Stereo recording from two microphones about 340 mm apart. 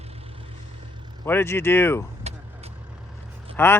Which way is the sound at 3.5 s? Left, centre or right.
Centre.